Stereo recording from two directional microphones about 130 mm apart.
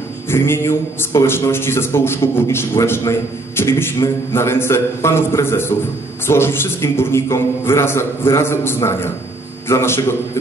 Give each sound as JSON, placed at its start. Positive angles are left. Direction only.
{"t": 0.3, "sound": "a man's voice", "side_deg": 20}